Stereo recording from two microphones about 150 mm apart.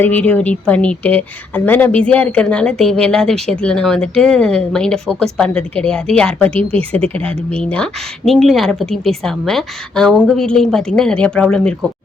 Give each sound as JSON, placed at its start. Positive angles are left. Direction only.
{"t": 0.0, "sound": "a woman's voice", "side_deg": 10}